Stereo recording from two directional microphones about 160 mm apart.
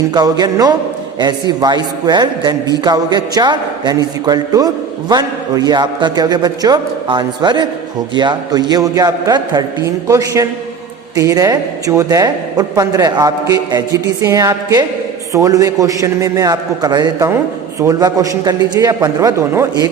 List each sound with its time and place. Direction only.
0.1 s a man's voice: 25° right (ahead or behind)